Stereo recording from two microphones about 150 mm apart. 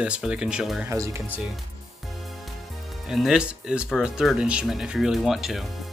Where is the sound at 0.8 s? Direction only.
20° right (ahead or behind).